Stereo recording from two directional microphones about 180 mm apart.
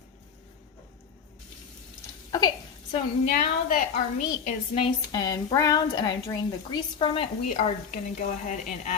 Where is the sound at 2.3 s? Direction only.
20° left (ahead or behind).